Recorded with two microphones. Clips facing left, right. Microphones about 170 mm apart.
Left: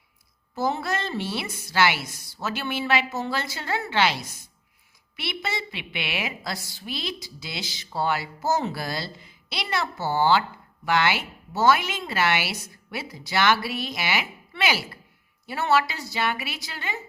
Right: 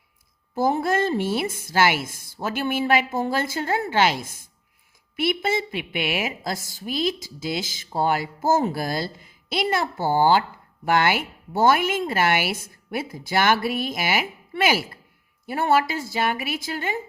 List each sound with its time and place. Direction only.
0.5 s a woman's voice: 50° right (ahead or behind)